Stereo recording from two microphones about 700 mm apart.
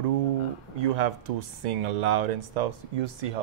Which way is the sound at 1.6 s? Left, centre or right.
Right.